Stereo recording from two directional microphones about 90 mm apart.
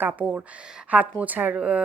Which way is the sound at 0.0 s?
15° right (ahead or behind).